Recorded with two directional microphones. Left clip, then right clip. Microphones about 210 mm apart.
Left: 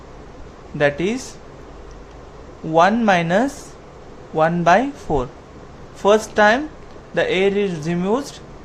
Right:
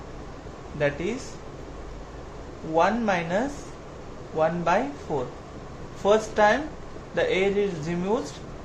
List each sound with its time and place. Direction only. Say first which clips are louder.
0.8 s speech: left 8 dB; 50° left (ahead or behind)
2.7 s a man's voice: left 8 dB; 50° left (ahead or behind)